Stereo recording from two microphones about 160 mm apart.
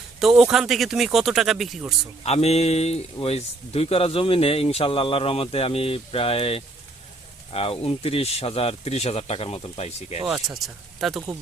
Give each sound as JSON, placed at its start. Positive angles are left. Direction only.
{"t": 0.2, "sound": "speech", "side_deg": 0}
{"t": 2.2, "sound": "speech", "side_deg": 40}
{"t": 10.2, "sound": "speech", "side_deg": 0}